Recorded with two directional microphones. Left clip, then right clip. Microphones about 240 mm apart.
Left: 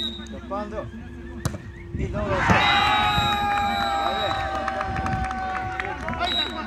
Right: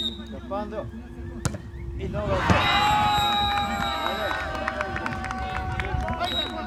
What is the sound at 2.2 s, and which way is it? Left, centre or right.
Basketball bounce, right.